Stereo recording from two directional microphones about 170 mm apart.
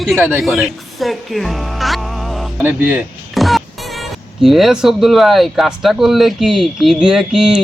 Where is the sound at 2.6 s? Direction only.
10° right (ahead or behind).